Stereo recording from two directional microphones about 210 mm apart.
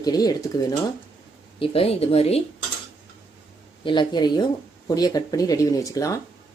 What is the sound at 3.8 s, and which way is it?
Speech, 20° left (ahead or behind).